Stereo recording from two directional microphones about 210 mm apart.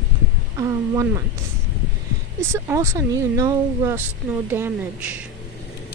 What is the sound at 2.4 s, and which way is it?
Speech, 10° right (ahead or behind).